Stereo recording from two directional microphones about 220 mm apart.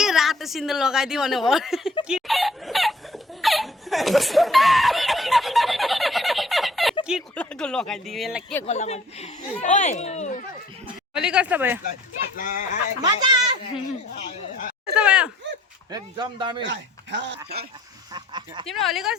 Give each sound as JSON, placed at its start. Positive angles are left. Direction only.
{"t": 0.0, "sound": "a woman's voice", "side_deg": 0}
{"t": 2.0, "sound": "laughter", "side_deg": 0}
{"t": 7.0, "sound": "speech", "side_deg": 0}
{"t": 8.6, "sound": "speech", "side_deg": 30}
{"t": 11.1, "sound": "a woman's voice", "side_deg": -5}
{"t": 12.4, "sound": "speech", "side_deg": 35}
{"t": 13.0, "sound": "a man's voice", "side_deg": -20}
{"t": 14.1, "sound": "speech", "side_deg": 30}
{"t": 14.9, "sound": "speech", "side_deg": -5}
{"t": 15.9, "sound": "a man's voice", "side_deg": -20}
{"t": 16.6, "sound": "speech", "side_deg": -55}
{"t": 18.1, "sound": "speech", "side_deg": -20}
{"t": 18.7, "sound": "a woman's voice", "side_deg": 0}